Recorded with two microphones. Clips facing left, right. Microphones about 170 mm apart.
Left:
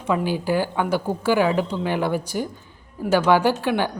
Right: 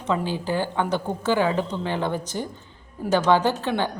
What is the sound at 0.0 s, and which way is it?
A woman's voice, 10° left (ahead or behind).